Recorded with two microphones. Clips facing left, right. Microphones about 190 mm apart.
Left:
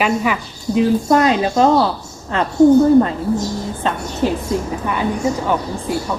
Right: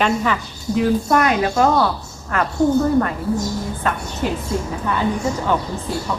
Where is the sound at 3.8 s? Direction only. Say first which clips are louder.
Left 2 dB; 25° left (ahead or behind).